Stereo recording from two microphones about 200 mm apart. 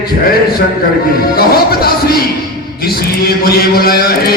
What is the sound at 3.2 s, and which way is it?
Mantra, 50° left (ahead or behind).